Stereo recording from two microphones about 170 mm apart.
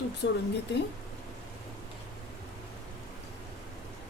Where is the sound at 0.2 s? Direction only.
90° left.